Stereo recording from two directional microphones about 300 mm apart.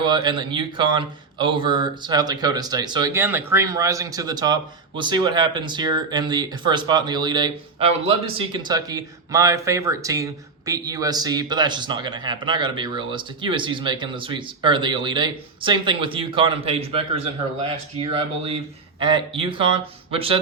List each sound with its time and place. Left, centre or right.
0.0 s speech: centre
18.9 s speech: centre